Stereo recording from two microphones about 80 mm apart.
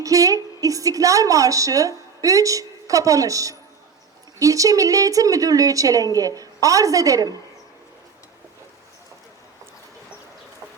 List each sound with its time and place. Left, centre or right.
0.0 s a woman's voice: right